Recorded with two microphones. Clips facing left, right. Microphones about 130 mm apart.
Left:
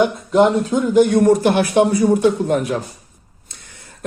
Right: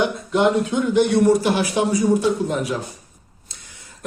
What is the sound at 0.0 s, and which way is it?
Speech, 45° left (ahead or behind).